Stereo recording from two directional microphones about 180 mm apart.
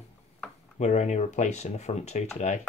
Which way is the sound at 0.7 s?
40° left (ahead or behind).